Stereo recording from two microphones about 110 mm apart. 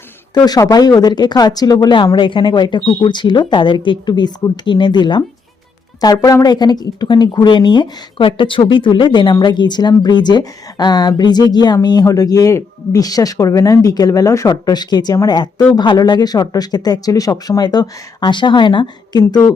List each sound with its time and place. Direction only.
0.3 s speech: 35° left (ahead or behind)
2.1 s a woman's voice: 50° left (ahead or behind)